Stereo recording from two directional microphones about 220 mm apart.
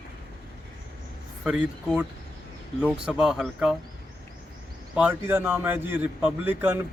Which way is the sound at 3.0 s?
5° right (ahead or behind).